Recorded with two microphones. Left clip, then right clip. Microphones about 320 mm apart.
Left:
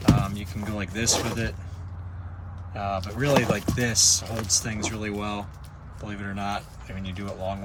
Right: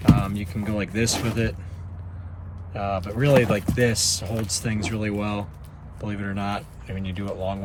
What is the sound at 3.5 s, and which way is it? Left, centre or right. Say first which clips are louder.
Speech: right 4 dB; right.